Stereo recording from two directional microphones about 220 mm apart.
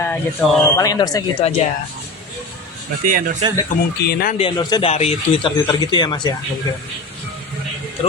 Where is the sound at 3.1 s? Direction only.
40° right (ahead or behind).